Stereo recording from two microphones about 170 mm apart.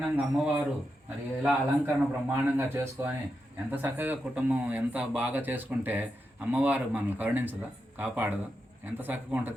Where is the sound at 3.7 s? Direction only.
10° right (ahead or behind).